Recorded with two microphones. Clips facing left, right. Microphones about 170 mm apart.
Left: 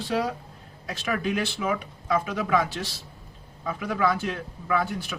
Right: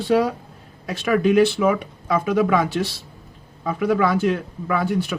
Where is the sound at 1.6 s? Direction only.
65° right (ahead or behind).